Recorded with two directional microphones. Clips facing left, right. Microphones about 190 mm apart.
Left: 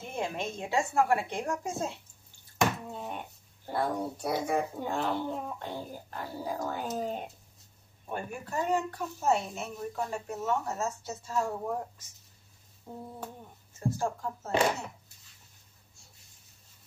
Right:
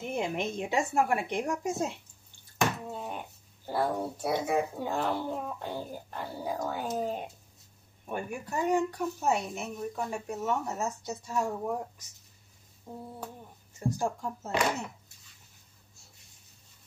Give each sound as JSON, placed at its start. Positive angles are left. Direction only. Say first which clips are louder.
{"t": 0.1, "sound": "a woman's voice", "louder": "right 2 dB", "side_deg": -15}
{"t": 2.9, "sound": "a child's voice", "louder": "right 1 dB", "side_deg": 0}
{"t": 8.1, "sound": "a woman's voice", "louder": "right 1 dB", "side_deg": -15}
{"t": 12.9, "sound": "a woman's voice", "louder": "even", "side_deg": -10}